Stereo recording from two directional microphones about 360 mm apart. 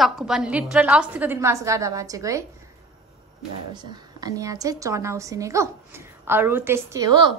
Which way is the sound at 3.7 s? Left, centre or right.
Centre.